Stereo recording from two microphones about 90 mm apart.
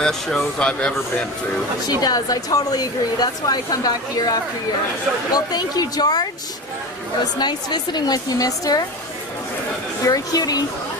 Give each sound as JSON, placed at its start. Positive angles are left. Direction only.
{"t": 0.0, "sound": "speech", "side_deg": 5}
{"t": 1.9, "sound": "speech", "side_deg": 45}
{"t": 7.3, "sound": "speech", "side_deg": 55}
{"t": 10.0, "sound": "speech", "side_deg": 40}